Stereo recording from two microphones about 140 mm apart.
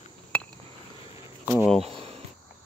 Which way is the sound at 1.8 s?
45° right (ahead or behind).